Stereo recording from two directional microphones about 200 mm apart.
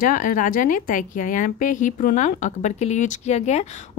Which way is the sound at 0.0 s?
40° left (ahead or behind).